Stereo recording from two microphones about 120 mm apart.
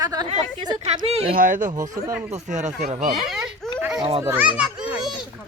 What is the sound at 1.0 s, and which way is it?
Speech, 60° right (ahead or behind).